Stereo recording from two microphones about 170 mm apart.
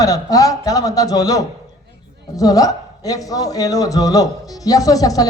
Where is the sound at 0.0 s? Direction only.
20° left (ahead or behind).